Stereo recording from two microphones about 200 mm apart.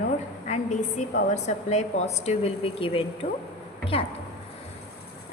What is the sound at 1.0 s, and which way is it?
Speech, 35° left (ahead or behind).